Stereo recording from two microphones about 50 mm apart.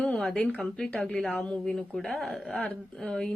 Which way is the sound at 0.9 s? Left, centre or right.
Left.